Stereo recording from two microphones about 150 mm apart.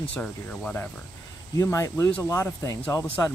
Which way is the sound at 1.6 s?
20° left (ahead or behind).